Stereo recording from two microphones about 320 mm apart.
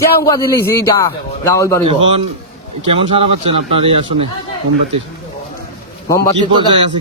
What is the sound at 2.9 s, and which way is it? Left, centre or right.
Speech, centre.